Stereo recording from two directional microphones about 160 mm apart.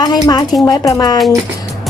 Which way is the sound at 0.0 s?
25° left (ahead or behind).